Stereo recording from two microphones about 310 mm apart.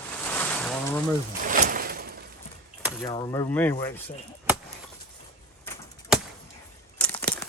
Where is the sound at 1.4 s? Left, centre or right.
Right.